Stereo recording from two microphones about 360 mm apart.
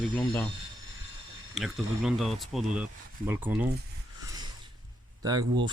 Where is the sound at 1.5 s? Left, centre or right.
Centre.